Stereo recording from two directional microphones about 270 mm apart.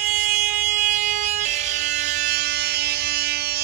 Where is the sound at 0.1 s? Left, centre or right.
Right.